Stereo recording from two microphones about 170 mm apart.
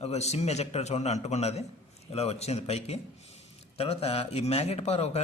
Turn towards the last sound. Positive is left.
turn(degrees=40)  # may be behind; listen again after turning